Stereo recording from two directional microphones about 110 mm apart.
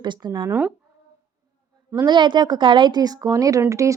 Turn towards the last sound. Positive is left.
turn(degrees=-30)  # may be behind; listen again after turning